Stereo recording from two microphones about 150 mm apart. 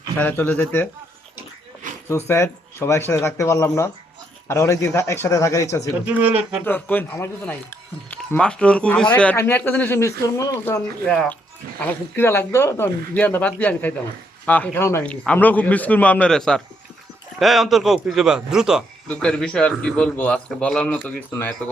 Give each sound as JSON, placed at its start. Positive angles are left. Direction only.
{"t": 0.2, "sound": "speech", "side_deg": 15}
{"t": 2.0, "sound": "speech", "side_deg": 15}
{"t": 6.1, "sound": "speech", "side_deg": -10}
{"t": 6.7, "sound": "speech", "side_deg": 10}
{"t": 11.1, "sound": "a man's voice", "side_deg": 5}
{"t": 19.0, "sound": "speech", "side_deg": 5}